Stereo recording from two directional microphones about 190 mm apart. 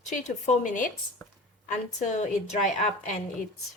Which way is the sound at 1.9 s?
40° left (ahead or behind).